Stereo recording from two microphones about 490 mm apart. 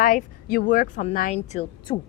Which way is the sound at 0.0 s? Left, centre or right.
Centre.